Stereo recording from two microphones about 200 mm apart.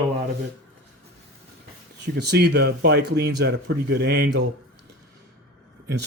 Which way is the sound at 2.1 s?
55° right (ahead or behind).